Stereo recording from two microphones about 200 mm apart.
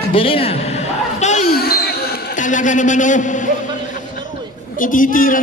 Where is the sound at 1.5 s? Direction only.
50° left (ahead or behind).